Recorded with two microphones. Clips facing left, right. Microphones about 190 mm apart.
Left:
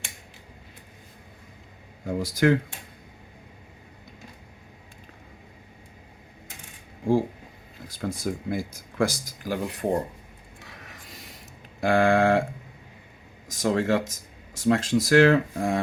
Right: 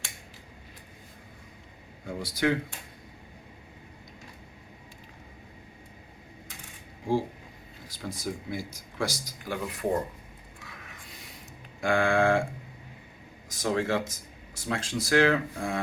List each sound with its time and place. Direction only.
2.0 s speech: 45° left (ahead or behind)
7.9 s speech: 55° left (ahead or behind); by 10.0 s 30° left (ahead or behind)
10.6 s a sound: 35° left (ahead or behind)
11.8 s speech: 40° left (ahead or behind)
13.5 s speech: 45° left (ahead or behind)